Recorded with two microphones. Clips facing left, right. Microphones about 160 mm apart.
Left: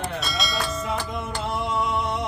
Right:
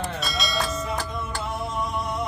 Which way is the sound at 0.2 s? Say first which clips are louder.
Even; centre (ahead or behind).